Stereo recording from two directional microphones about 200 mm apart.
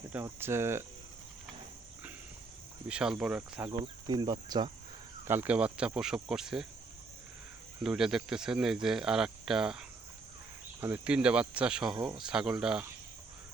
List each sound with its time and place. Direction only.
0.1 s speech: 10° right (ahead or behind)
2.8 s speech: 5° right (ahead or behind)
3.7 s speech: 25° right (ahead or behind)
5.3 s speech: 10° right (ahead or behind)
7.9 s speech: centre (ahead or behind)